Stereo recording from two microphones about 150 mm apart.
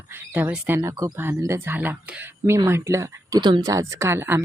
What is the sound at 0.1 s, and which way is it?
Speech, 10° right (ahead or behind).